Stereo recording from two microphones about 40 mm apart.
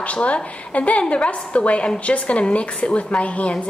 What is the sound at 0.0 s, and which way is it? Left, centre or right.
A woman's voice, left.